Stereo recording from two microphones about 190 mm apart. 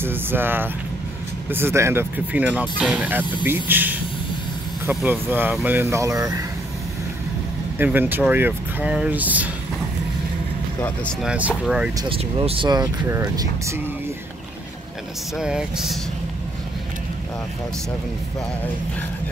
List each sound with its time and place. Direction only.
0.0 s speech: 10° right (ahead or behind)
7.8 s speech: 10° right (ahead or behind)
11.2 s speech: 5° right (ahead or behind)
12.0 s speech: 25° right (ahead or behind)
15.3 s speech: 5° right (ahead or behind)